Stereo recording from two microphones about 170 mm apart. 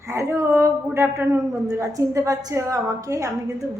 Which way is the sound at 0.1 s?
15° right (ahead or behind).